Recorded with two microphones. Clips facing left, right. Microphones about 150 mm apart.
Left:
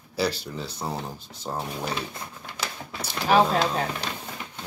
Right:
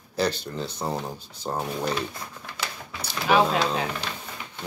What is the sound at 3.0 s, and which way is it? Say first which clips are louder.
Speech: left 1 dB; 35° left (ahead or behind).